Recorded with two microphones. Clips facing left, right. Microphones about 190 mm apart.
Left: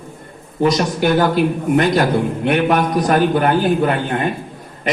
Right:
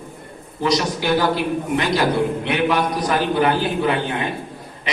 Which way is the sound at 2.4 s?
50° left (ahead or behind).